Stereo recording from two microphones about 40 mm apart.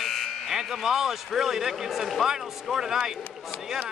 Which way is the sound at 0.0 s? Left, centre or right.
Centre.